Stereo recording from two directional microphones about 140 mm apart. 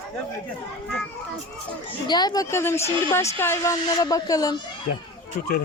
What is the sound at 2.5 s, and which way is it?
Speech, 20° left (ahead or behind).